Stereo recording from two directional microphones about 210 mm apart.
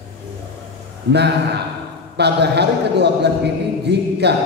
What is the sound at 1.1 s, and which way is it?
A man's voice, 55° right (ahead or behind).